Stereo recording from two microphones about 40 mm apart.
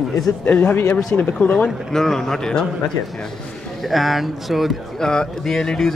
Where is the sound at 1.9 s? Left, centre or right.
Centre.